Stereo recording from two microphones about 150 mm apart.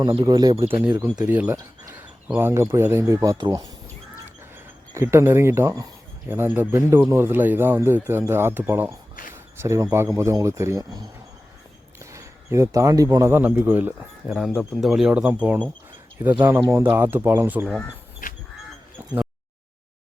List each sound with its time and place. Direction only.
0.2 s speech: 25° right (ahead or behind)
0.7 s speech: 15° right (ahead or behind)
1.5 s speech: 25° right (ahead or behind)
12.1 s a man's voice: 20° right (ahead or behind)
13.3 s speech: 10° right (ahead or behind)
14.3 s speech: centre (ahead or behind)
18.2 s a sound: 65° left (ahead or behind)